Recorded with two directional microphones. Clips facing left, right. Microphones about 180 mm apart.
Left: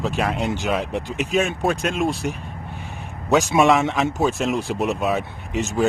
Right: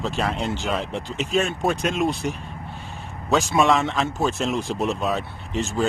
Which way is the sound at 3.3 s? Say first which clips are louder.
Left 3 dB; 15° left (ahead or behind).